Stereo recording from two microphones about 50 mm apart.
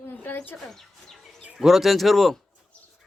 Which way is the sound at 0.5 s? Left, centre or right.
Centre.